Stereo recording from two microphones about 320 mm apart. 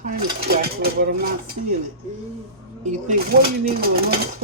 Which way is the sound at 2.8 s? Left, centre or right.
Right.